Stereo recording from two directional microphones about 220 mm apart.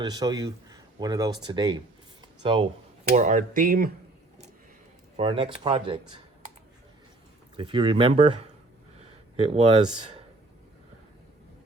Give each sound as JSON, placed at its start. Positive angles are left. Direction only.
{"t": 0.0, "sound": "speech", "side_deg": -20}
{"t": 2.2, "sound": "a sound", "side_deg": -20}
{"t": 3.2, "sound": "speech", "side_deg": -35}
{"t": 5.1, "sound": "speech", "side_deg": -25}
{"t": 7.5, "sound": "speech", "side_deg": -25}
{"t": 9.0, "sound": "a sound", "side_deg": -25}